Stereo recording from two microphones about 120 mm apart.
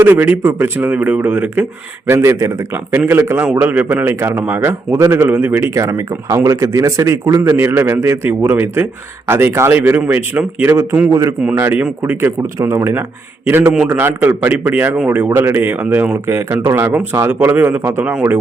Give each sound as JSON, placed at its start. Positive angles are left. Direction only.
{"t": 0.0, "sound": "a man's voice", "side_deg": -15}
{"t": 11.1, "sound": "a man's voice", "side_deg": -30}
{"t": 11.4, "sound": "a man's voice", "side_deg": -15}